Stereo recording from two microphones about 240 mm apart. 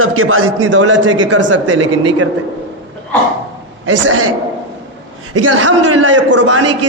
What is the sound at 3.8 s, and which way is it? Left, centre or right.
Speech, right.